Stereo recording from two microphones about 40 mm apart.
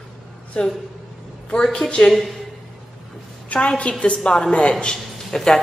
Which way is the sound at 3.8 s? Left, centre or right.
Left.